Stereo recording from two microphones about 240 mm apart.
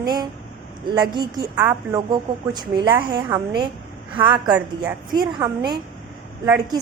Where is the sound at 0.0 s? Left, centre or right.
Centre.